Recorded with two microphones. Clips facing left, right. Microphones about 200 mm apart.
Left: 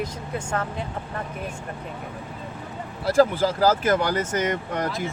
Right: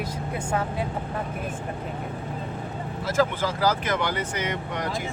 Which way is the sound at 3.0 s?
35° left (ahead or behind).